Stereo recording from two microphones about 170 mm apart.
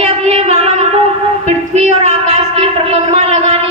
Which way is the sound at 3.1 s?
40° right (ahead or behind).